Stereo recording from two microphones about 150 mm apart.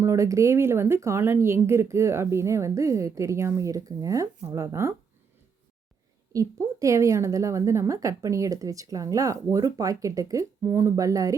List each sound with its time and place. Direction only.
0.0 s a woman's voice: 20° right (ahead or behind)
6.3 s a woman's voice: 20° right (ahead or behind)